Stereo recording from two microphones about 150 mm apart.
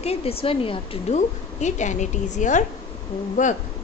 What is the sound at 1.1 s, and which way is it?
A woman's voice, 50° left (ahead or behind).